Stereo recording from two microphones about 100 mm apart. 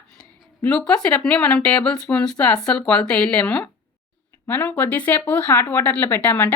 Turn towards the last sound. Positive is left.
turn(degrees=20)  # may be behind; listen again after turning